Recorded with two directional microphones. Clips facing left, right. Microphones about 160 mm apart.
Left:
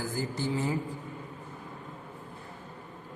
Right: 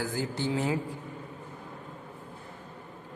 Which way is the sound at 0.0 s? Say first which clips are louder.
Right 1 dB; 75° right (ahead or behind).